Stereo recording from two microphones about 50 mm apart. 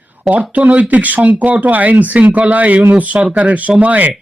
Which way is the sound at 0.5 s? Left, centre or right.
Right.